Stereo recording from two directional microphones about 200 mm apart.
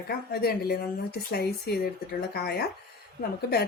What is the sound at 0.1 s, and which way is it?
A woman's voice, 50° left (ahead or behind).